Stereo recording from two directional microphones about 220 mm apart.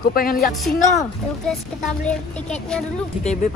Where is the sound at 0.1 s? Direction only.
40° left (ahead or behind).